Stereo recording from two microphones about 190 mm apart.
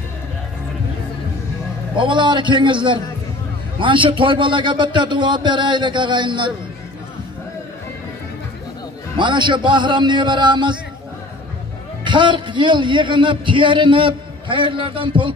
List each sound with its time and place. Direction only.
2.0 s a man's voice: 25° right (ahead or behind)
9.1 s a man's voice: 25° right (ahead or behind)
12.0 s a man's voice: 25° right (ahead or behind)